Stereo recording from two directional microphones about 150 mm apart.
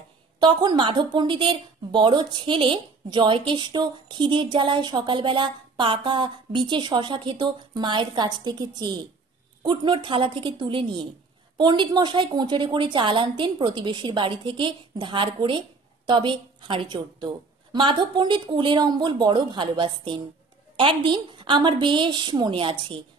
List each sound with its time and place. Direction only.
0.4 s a woman's voice: 30° right (ahead or behind)